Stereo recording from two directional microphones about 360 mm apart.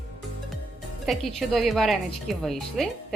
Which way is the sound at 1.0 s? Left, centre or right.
Centre.